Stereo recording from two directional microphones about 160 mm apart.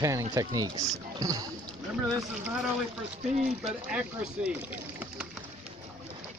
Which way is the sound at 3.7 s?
5° right (ahead or behind).